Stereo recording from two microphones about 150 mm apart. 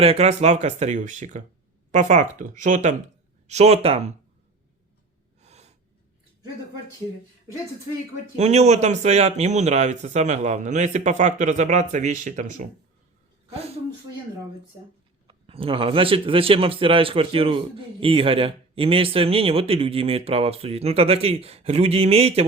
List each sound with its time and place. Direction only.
0.0 s speech: 45° right (ahead or behind)
5.4 s gasp: 45° right (ahead or behind)
8.4 s speech: 45° right (ahead or behind)
13.5 s a sound: 45° right (ahead or behind)
15.3 s a man's voice: 35° right (ahead or behind)